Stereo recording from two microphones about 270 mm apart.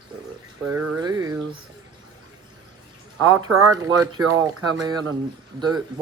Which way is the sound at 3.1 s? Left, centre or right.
Centre.